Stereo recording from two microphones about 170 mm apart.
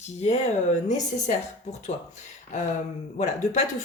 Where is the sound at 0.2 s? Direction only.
40° left (ahead or behind).